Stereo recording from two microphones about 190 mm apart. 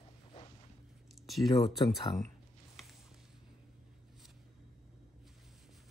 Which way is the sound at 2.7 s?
Centre (ahead or behind).